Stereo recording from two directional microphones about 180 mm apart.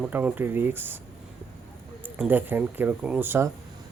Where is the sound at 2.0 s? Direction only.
10° right (ahead or behind).